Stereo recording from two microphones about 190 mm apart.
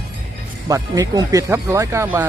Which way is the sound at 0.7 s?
20° right (ahead or behind).